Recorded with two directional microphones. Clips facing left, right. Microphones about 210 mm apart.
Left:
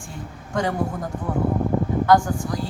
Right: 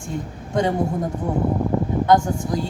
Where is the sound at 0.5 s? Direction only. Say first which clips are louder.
Right 3 dB; 20° right (ahead or behind).